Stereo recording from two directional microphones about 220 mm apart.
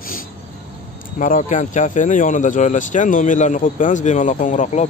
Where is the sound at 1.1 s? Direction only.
35° left (ahead or behind).